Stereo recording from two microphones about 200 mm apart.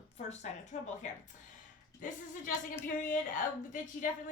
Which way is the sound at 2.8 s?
40° left (ahead or behind).